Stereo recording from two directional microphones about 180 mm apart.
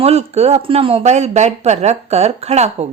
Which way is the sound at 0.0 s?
35° right (ahead or behind).